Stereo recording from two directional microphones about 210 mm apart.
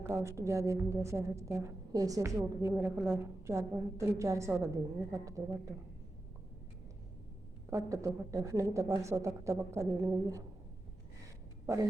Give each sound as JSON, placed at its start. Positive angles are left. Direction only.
{"t": 0.0, "sound": "a woman's voice", "side_deg": -15}
{"t": 7.7, "sound": "a woman's voice", "side_deg": -15}
{"t": 11.6, "sound": "speech", "side_deg": -15}